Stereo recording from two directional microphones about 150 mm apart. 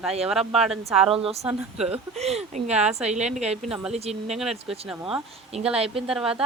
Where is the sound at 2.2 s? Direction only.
45° right (ahead or behind).